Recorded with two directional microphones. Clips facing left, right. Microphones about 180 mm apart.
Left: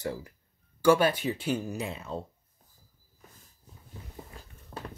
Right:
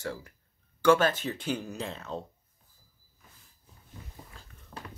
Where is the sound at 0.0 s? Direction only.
15° left (ahead or behind).